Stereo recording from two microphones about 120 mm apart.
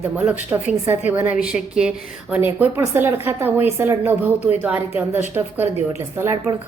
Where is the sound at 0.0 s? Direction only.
15° right (ahead or behind).